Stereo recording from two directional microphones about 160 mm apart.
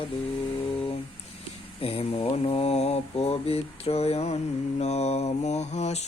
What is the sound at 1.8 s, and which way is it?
Mantra, 35° left (ahead or behind).